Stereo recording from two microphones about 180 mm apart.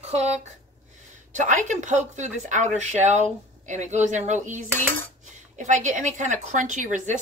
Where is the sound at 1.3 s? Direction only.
45° right (ahead or behind).